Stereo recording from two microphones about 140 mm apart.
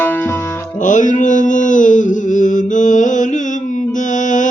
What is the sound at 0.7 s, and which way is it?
Music, 65° left (ahead or behind).